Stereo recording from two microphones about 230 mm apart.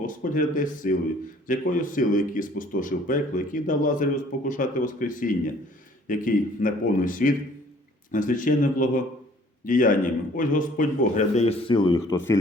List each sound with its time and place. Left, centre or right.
0.0 s speech: left; by 12.4 s centre